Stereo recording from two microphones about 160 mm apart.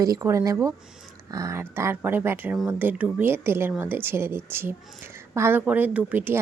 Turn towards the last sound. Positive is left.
turn(degrees=-10)  # may be behind; listen again after turning